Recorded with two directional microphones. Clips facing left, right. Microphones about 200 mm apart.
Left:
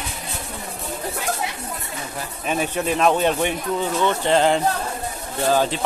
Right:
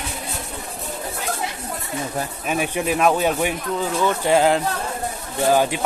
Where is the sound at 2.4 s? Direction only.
10° right (ahead or behind).